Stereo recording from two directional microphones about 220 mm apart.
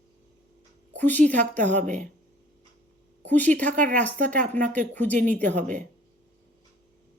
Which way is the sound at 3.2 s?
10° left (ahead or behind).